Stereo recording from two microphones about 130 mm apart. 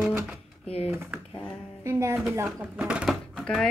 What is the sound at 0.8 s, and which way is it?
Typing, 15° right (ahead or behind).